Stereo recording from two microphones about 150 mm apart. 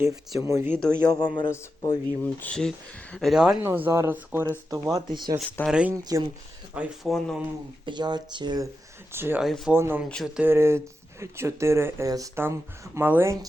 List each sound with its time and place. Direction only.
0.0 s speech: 20° right (ahead or behind)
1.1 s a man's voice: 25° left (ahead or behind)
2.2 s speech: 10° left (ahead or behind)
3.6 s speech: 15° right (ahead or behind)
4.7 s speech: 25° right (ahead or behind)
5.4 s speech: 10° left (ahead or behind)
5.6 s speech: 5° right (ahead or behind)
5.9 s speech: 25° right (ahead or behind)
6.7 s speech: 5° right (ahead or behind)
7.9 s speech: 30° right (ahead or behind)
9.1 s speech: 15° right (ahead or behind)
9.4 s speech: centre (ahead or behind)
9.7 s speech: 15° right (ahead or behind)